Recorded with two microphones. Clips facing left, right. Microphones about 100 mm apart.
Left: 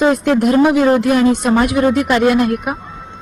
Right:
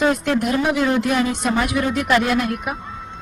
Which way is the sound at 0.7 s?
40° left (ahead or behind).